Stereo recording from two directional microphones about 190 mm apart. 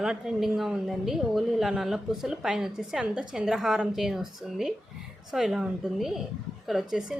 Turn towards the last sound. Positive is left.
turn(degrees=-5)  # may be behind; listen again after turning